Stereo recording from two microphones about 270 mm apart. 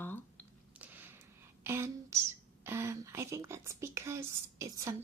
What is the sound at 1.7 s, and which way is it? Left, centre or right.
Speech, centre.